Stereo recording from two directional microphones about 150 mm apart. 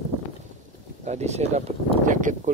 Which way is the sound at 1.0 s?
45° right (ahead or behind).